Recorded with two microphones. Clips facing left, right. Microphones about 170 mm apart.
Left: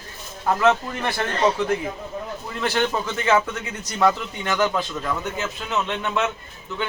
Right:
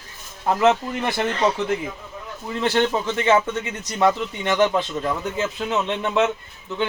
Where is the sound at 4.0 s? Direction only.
20° right (ahead or behind).